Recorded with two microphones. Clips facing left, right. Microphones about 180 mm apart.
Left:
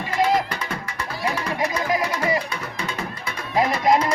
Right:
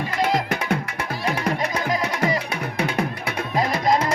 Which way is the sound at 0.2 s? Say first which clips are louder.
Left 2 dB; 65° right (ahead or behind).